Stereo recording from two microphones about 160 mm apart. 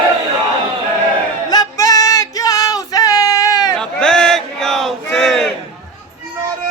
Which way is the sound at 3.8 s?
5° left (ahead or behind).